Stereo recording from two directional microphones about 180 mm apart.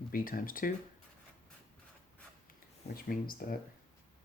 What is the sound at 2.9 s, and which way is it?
Speech, 55° left (ahead or behind).